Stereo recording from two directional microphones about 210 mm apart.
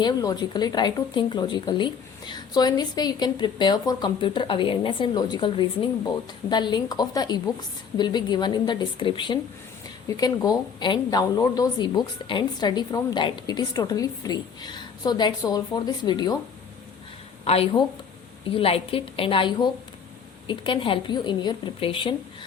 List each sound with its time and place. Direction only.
0.0 s a woman's voice: 20° left (ahead or behind)
17.4 s a woman's voice: 30° left (ahead or behind)